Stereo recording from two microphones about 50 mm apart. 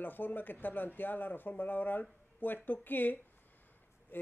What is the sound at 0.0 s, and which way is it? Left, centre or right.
Speech, left.